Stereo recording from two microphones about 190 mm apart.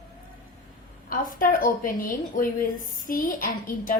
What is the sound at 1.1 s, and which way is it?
A woman's voice, 45° left (ahead or behind).